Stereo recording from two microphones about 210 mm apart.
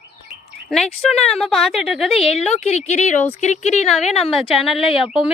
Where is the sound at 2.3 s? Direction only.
30° left (ahead or behind).